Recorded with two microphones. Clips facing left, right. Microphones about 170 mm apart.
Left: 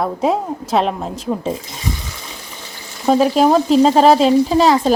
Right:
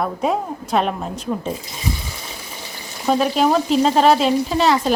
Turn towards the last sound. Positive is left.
turn(degrees=35)  # may be behind; listen again after turning